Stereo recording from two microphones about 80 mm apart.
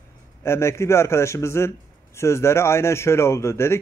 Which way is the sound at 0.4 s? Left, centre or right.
Left.